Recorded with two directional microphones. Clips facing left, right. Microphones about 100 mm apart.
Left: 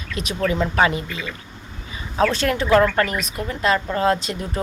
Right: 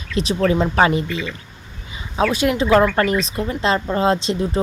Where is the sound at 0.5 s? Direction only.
20° right (ahead or behind).